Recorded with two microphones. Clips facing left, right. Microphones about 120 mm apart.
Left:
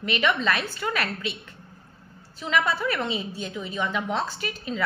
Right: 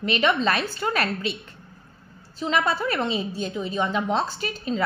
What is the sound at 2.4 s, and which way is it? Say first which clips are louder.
A woman's voice: right 1 dB; 35° right (ahead or behind).